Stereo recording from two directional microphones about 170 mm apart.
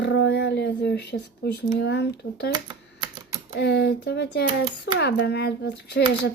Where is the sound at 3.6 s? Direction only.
80° left.